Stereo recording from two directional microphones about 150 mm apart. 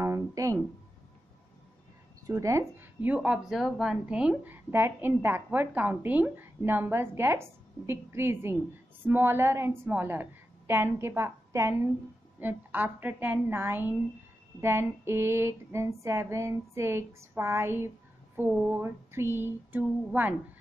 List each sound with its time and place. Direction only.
0.0 s music: 20° right (ahead or behind)
2.2 s speech: 20° right (ahead or behind)